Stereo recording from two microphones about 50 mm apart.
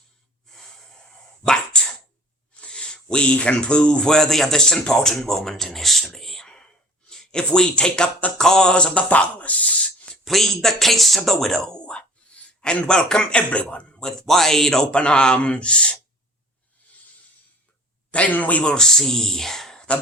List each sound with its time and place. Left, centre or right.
0.4 s snort: centre
1.7 s sneeze: centre
2.6 s speech: left; by 6.1 s centre
6.1 s whispering: centre
7.1 s speech: centre; by 9.7 s left
10.1 s speech: centre
11.9 s a man's voice: centre
14.0 s speech: centre
18.1 s speech: left
18.6 s speech: centre